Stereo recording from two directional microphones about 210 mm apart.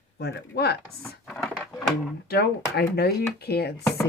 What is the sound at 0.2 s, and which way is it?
Speech, 50° left (ahead or behind).